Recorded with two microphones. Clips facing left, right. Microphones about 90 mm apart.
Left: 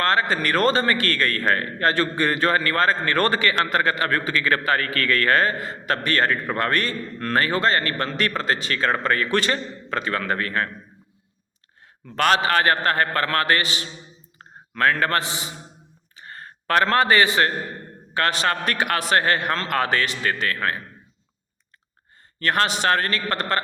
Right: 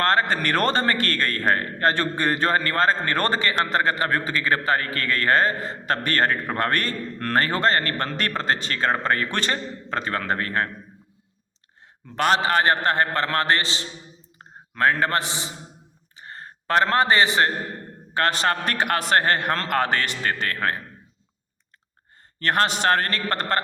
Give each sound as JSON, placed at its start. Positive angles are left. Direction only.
{"t": 0.0, "sound": "a man's voice", "side_deg": -45}
{"t": 12.0, "sound": "a man's voice", "side_deg": -20}
{"t": 16.1, "sound": "a sound", "side_deg": -25}
{"t": 18.1, "sound": "a man's voice", "side_deg": -35}
{"t": 22.4, "sound": "a man's voice", "side_deg": -40}